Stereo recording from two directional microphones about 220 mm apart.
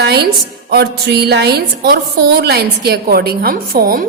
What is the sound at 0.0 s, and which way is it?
A woman's voice, 45° right (ahead or behind).